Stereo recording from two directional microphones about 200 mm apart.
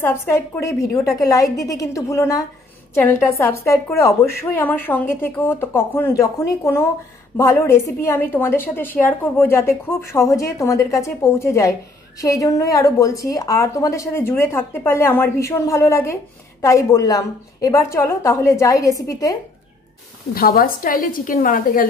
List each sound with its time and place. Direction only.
0.0 s a woman's voice: 10° left (ahead or behind)
20.3 s a woman's voice: 50° left (ahead or behind)